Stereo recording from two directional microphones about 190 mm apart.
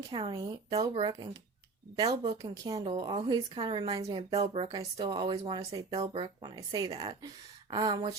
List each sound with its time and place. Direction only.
0.1 s a woman's voice: 25° right (ahead or behind)
2.4 s a woman's voice: 20° right (ahead or behind)